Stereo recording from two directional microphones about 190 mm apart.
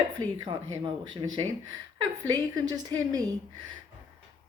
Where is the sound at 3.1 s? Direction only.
20° right (ahead or behind).